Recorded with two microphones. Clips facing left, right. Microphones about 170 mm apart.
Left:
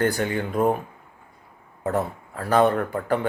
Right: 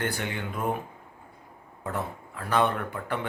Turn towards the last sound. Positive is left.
turn(degrees=40)  # may be behind; listen again after turning